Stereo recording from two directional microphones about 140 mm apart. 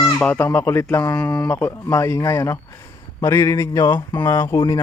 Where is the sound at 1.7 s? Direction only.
20° left (ahead or behind).